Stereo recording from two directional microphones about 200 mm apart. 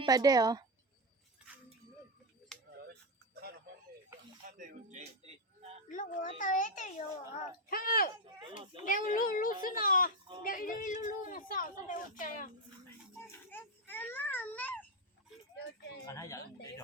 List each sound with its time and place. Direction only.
0.0 s a woman's voice: 20° right (ahead or behind)
2.5 s a sound: 5° left (ahead or behind)
4.5 s a sound: 40° right (ahead or behind)
5.9 s a child's voice: 40° left (ahead or behind)
7.7 s a child's voice: 45° left (ahead or behind)
8.2 s a woman's voice: 25° right (ahead or behind)
8.7 s a child's voice: 45° left (ahead or behind)
13.2 s child singing: 10° left (ahead or behind)
16.0 s a man's voice: 15° left (ahead or behind)